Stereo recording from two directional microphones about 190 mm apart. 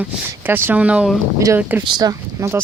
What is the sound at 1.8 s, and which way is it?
Speech, 20° right (ahead or behind).